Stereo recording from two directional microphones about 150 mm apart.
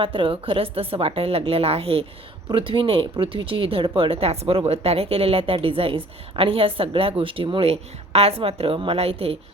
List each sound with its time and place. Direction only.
0.0 s speech: 35° right (ahead or behind)